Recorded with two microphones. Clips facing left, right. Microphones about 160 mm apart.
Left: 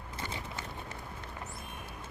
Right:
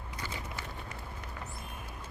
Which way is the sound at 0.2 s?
25° left (ahead or behind).